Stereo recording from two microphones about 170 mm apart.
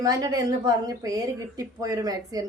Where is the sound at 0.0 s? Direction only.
20° right (ahead or behind).